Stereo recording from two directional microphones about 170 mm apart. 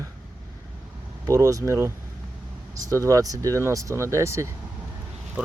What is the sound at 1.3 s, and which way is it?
Speech, 20° right (ahead or behind).